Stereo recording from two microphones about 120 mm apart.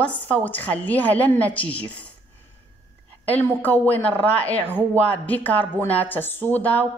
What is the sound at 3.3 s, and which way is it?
Speech, 15° left (ahead or behind).